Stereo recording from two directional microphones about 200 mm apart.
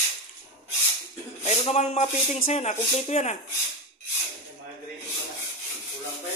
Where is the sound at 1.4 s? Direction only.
35° left (ahead or behind).